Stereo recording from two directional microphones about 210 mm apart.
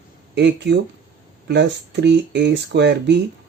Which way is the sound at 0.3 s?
55° right (ahead or behind).